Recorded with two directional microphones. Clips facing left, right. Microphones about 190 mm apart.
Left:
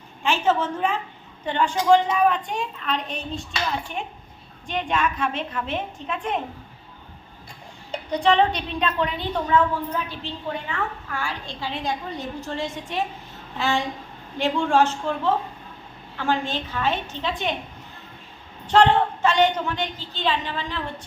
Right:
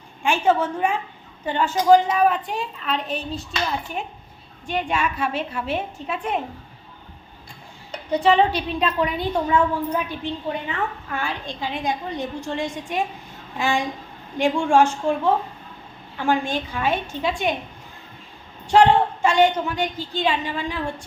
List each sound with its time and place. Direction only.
0.2 s a woman's voice: 10° right (ahead or behind)
4.6 s a woman's voice: 5° right (ahead or behind)
8.1 s a woman's voice: 5° right (ahead or behind)
18.7 s a woman's voice: 10° right (ahead or behind)